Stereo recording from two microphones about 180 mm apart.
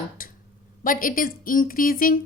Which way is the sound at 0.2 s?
50° left (ahead or behind).